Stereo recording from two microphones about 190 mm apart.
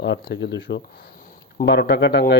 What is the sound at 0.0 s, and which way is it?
Speech, 65° left (ahead or behind).